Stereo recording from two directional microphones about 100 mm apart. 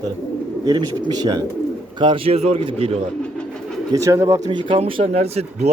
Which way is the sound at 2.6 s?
70° right (ahead or behind).